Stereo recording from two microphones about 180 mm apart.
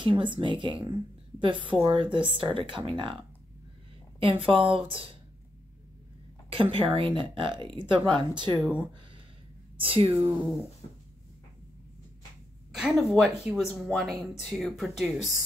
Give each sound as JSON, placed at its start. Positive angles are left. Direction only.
{"t": 0.0, "sound": "speech", "side_deg": -25}
{"t": 6.5, "sound": "speech", "side_deg": -30}
{"t": 9.8, "sound": "speech", "side_deg": -30}
{"t": 12.7, "sound": "speech", "side_deg": -5}